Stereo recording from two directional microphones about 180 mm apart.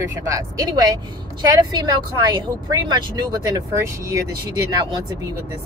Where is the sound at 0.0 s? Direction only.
15° right (ahead or behind).